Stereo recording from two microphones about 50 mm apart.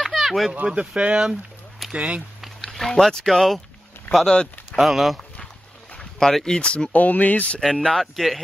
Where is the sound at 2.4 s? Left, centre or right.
Centre.